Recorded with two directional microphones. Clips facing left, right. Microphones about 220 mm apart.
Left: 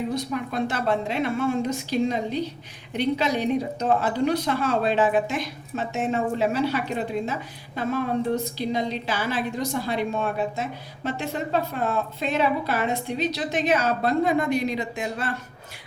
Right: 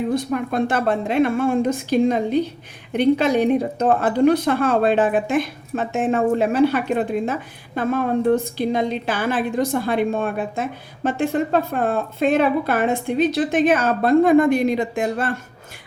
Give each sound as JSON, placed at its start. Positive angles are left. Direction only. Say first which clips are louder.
{"t": 0.1, "sound": "a woman's voice", "louder": "right 6 dB", "side_deg": -50}